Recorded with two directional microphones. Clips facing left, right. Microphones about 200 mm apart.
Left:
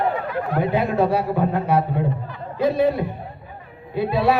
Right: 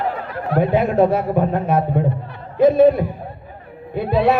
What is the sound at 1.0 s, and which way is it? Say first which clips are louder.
A man's voice: right 3 dB; 45° right (ahead or behind).